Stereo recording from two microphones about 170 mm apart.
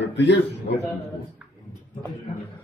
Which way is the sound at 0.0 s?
90° left.